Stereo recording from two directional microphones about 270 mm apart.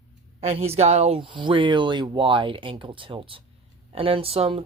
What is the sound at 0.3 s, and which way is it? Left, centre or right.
Speech, right.